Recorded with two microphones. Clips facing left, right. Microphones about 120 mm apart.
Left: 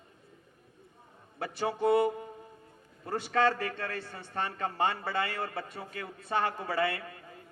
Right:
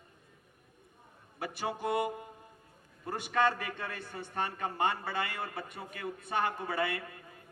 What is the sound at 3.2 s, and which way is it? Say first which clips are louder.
A man's voice: left 2 dB; 20° right (ahead or behind).